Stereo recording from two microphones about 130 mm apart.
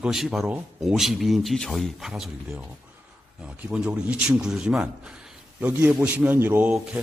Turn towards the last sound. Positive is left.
turn(degrees=-15)  # may be behind; listen again after turning